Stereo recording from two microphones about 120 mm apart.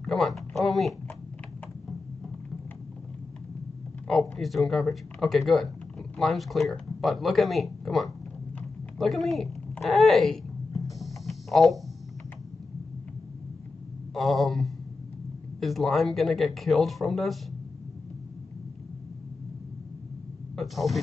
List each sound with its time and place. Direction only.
0.0 s speech: centre (ahead or behind)
4.1 s speech: centre (ahead or behind)
11.0 s a sound: centre (ahead or behind)
14.1 s speech: centre (ahead or behind)
20.5 s speech: centre (ahead or behind)